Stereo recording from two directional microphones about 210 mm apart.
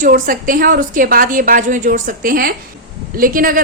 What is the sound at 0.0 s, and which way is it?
A woman's voice, 40° right (ahead or behind).